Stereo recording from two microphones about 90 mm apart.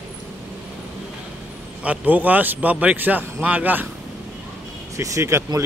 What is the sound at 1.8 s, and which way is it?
A man's voice, 15° right (ahead or behind).